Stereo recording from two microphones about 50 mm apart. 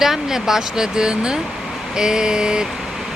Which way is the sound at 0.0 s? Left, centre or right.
Centre.